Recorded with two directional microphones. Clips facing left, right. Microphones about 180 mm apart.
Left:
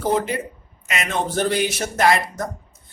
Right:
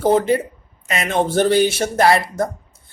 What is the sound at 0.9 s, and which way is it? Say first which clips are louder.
A man's voice: right 5 dB; 30° right (ahead or behind).